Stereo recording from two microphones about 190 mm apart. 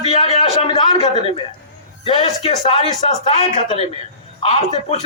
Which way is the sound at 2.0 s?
30° left (ahead or behind).